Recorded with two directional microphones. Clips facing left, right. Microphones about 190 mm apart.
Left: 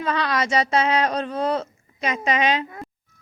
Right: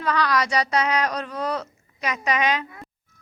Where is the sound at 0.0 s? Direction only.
25° left (ahead or behind).